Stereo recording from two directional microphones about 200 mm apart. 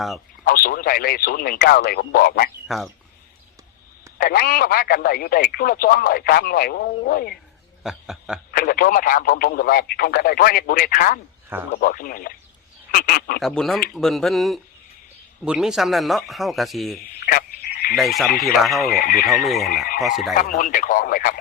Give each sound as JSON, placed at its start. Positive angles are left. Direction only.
{"t": 0.4, "sound": "speech", "side_deg": 45}
{"t": 2.6, "sound": "speech", "side_deg": 0}
{"t": 4.2, "sound": "speech", "side_deg": 50}
{"t": 7.9, "sound": "speech", "side_deg": 0}
{"t": 8.5, "sound": "speech", "side_deg": 45}
{"t": 13.4, "sound": "speech", "side_deg": 0}
{"t": 17.0, "sound": "frog", "side_deg": 45}
{"t": 17.9, "sound": "speech", "side_deg": 0}
{"t": 18.9, "sound": "speech", "side_deg": 50}
{"t": 19.3, "sound": "speech", "side_deg": 0}
{"t": 20.3, "sound": "speech", "side_deg": 45}